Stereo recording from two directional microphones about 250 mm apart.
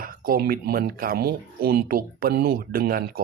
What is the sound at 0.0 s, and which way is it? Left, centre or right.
Speech, right.